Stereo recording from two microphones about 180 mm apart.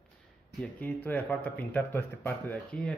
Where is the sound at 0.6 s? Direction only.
10° left (ahead or behind).